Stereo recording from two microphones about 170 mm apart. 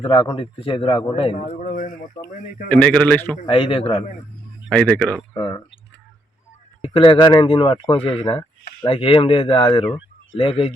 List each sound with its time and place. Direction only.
0.0 s speech: 30° left (ahead or behind)
1.4 s speech: 45° left (ahead or behind)
2.6 s a man's voice: 5° left (ahead or behind)
3.4 s speech: 30° left (ahead or behind)
4.7 s a man's voice: 5° left (ahead or behind)
5.3 s speech: 25° left (ahead or behind)
6.8 s speech: 30° left (ahead or behind)